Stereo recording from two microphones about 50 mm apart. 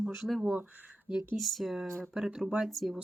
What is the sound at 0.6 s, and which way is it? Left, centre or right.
Speech, right.